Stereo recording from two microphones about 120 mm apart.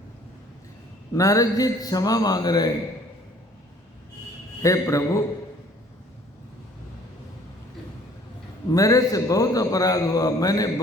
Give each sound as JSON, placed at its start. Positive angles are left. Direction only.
{"t": 1.1, "sound": "a man's voice", "side_deg": 30}
{"t": 4.6, "sound": "a man's voice", "side_deg": 25}
{"t": 8.7, "sound": "a man's voice", "side_deg": 30}